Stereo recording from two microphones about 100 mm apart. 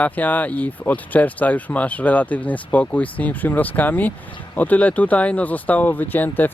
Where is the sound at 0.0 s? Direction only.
15° left (ahead or behind).